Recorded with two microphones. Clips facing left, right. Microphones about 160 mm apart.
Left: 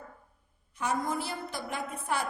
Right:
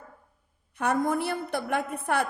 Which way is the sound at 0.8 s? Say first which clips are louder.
Right 6 dB; 55° right (ahead or behind).